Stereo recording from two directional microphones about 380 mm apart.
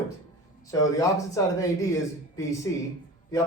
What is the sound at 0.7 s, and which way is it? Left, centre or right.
Speech, centre.